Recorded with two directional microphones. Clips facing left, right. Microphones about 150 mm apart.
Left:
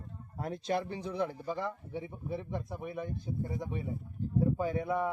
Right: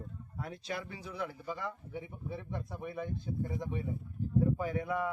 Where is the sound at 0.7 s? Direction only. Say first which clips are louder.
Left 9 dB; 35° left (ahead or behind).